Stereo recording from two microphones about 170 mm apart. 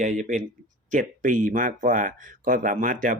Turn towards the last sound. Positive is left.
turn(degrees=-55)  # may be behind; listen again after turning